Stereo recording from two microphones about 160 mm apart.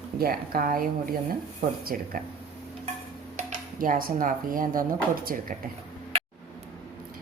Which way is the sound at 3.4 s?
50° right (ahead or behind).